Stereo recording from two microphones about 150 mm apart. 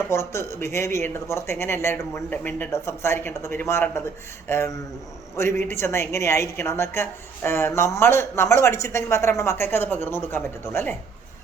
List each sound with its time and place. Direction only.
0.1 s a woman's voice: 20° left (ahead or behind)